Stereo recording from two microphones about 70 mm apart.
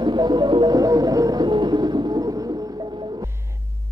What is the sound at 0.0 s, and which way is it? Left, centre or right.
Music, right.